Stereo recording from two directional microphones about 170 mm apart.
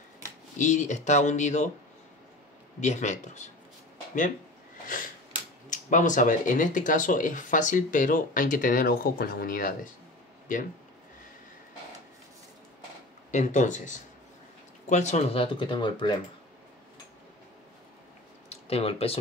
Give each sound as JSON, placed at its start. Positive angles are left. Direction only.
{"t": 0.6, "sound": "speech", "side_deg": 45}
{"t": 2.8, "sound": "speech", "side_deg": 45}
{"t": 4.8, "sound": "sniff", "side_deg": 50}
{"t": 5.7, "sound": "speech", "side_deg": 45}
{"t": 13.3, "sound": "speech", "side_deg": 45}
{"t": 18.5, "sound": "speech", "side_deg": 35}